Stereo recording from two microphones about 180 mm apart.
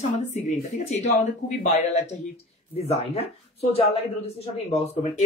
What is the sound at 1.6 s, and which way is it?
Speech, 40° left (ahead or behind).